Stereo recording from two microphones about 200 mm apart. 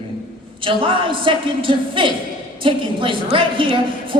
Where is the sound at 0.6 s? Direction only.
25° right (ahead or behind).